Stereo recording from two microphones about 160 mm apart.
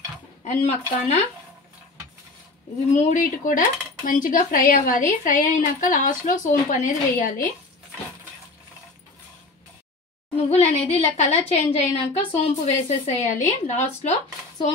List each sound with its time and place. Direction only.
0.4 s speech: 45° left (ahead or behind)
2.9 s cutlery: 50° left (ahead or behind)
10.3 s a woman's voice: 40° left (ahead or behind)